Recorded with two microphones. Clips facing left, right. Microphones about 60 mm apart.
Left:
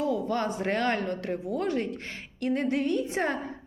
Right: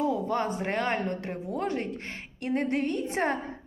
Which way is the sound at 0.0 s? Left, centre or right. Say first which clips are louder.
Even; right.